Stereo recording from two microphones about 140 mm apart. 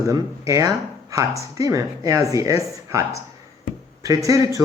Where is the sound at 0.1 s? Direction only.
25° right (ahead or behind).